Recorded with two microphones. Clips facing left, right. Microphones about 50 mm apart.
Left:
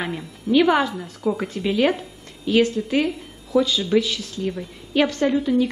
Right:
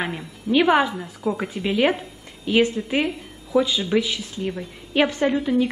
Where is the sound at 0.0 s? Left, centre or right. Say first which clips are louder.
Even; centre.